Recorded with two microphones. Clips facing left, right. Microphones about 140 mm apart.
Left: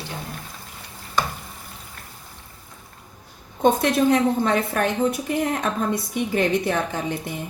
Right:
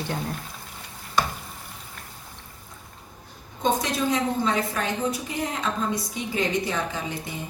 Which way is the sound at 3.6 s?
60° left (ahead or behind).